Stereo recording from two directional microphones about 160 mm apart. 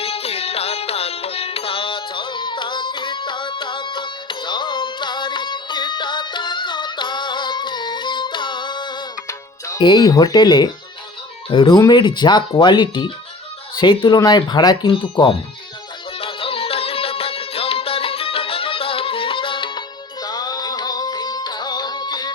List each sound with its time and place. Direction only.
0.0 s music: 40° left (ahead or behind)
9.6 s speech: 25° left (ahead or behind)
16.2 s music: 35° left (ahead or behind)